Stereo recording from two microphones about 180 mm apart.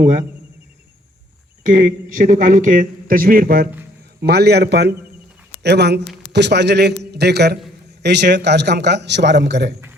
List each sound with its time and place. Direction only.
1.6 s a man's voice: 50° right (ahead or behind); by 9.7 s 70° right (ahead or behind)